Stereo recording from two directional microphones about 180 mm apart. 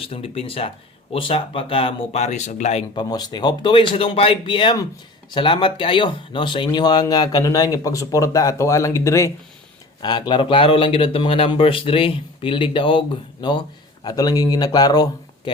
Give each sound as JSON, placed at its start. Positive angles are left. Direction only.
{"t": 0.0, "sound": "speech", "side_deg": 30}